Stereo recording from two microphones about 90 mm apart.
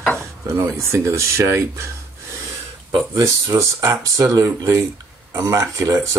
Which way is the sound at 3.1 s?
35° right (ahead or behind).